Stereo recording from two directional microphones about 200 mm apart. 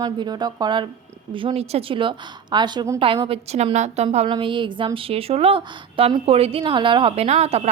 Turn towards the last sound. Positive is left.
turn(degrees=-30)  # may be behind; listen again after turning